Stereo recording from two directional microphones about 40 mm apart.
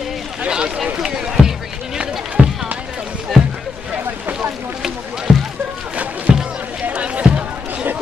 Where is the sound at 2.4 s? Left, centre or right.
Right.